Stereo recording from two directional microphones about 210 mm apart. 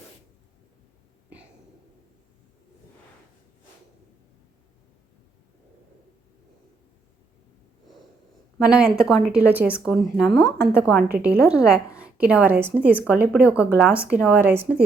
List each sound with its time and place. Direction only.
8.5 s speech: 5° right (ahead or behind)
10.3 s a woman's voice: 50° right (ahead or behind)
10.8 s a woman's voice: 5° right (ahead or behind)